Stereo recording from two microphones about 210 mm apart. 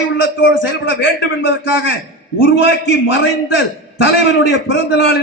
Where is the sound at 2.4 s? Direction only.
65° left (ahead or behind).